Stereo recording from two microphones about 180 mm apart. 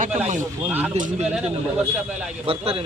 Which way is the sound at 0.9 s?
45° right (ahead or behind).